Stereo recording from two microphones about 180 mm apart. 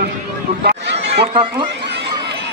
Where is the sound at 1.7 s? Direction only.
70° right (ahead or behind).